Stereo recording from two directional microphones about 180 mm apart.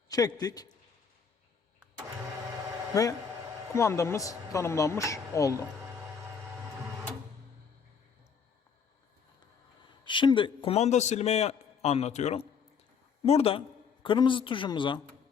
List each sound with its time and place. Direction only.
0.1 s a woman's voice: 20° left (ahead or behind)
2.9 s a man's voice: 20° left (ahead or behind)
10.0 s a man's voice: 25° left (ahead or behind)